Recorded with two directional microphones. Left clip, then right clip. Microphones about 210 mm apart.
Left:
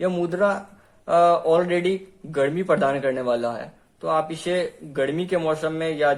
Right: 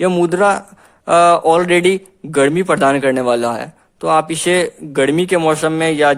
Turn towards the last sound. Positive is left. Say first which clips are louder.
# right 8 dB
turn(degrees=-40)  # may be behind; listen again after turning